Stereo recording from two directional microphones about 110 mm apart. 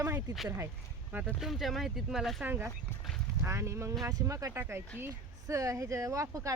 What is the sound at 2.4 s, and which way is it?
Speech, 20° right (ahead or behind).